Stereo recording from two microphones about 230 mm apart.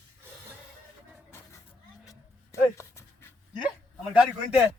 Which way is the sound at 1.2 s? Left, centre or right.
Centre.